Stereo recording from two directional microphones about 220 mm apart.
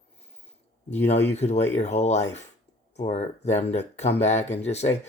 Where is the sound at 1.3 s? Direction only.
30° left (ahead or behind).